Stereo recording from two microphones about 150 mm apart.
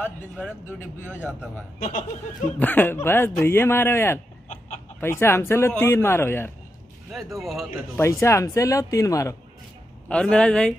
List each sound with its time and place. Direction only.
0.0 s speech: 10° left (ahead or behind)
1.0 s a man's voice: 10° right (ahead or behind)
1.8 s speech: 60° left (ahead or behind)
2.6 s speech: 10° left (ahead or behind)
7.3 s speech: centre (ahead or behind)
8.0 s speech: 20° left (ahead or behind)
10.0 s speech: 5° left (ahead or behind)